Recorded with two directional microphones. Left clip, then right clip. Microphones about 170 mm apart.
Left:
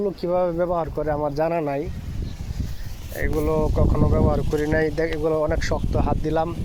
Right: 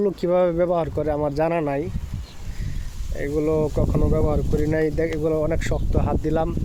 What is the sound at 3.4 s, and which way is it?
Speech, 60° right (ahead or behind).